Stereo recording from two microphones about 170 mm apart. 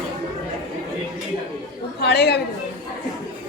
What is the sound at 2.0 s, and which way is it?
Speech, 75° left (ahead or behind).